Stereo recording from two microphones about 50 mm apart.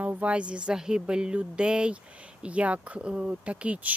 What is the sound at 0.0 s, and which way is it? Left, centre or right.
Speech, right.